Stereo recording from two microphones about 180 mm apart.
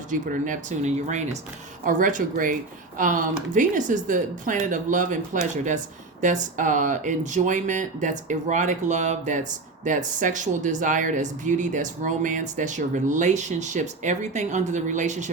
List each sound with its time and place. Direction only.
0.1 s speech: 45° right (ahead or behind)